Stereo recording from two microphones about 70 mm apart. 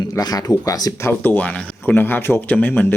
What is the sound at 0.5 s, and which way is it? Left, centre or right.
Speech, left.